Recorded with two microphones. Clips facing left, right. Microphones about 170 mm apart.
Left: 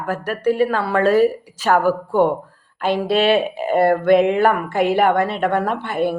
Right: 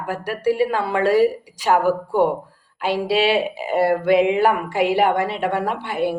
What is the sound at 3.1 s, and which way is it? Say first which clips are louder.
A woman's voice: left 2 dB; 55° left (ahead or behind).